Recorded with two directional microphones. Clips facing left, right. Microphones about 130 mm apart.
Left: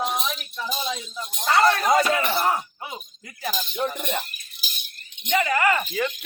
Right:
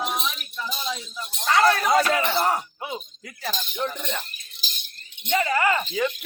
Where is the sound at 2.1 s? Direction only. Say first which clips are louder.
Right 1 dB; 25° right (ahead or behind).